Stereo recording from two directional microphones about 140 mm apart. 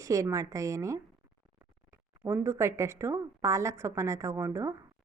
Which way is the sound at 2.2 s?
20° right (ahead or behind).